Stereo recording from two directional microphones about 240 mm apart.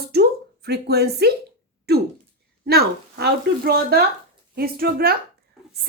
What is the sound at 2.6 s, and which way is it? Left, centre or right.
A woman's voice, right.